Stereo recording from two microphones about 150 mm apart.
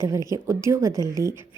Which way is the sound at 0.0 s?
20° right (ahead or behind).